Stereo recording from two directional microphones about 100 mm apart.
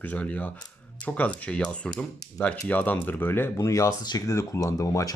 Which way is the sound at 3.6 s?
30° left (ahead or behind).